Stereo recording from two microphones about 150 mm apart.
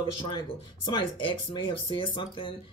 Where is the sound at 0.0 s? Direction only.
35° left (ahead or behind).